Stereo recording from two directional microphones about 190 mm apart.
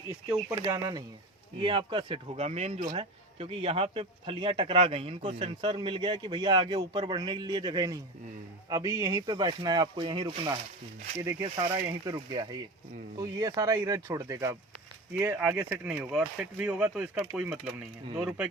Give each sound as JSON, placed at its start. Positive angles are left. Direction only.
{"t": 0.5, "sound": "a man's voice", "side_deg": -15}